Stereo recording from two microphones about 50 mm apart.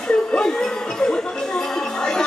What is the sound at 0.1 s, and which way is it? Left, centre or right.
Music, centre.